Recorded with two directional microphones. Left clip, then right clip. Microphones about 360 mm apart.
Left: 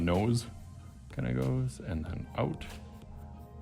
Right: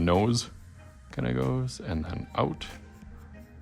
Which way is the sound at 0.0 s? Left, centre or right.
Centre.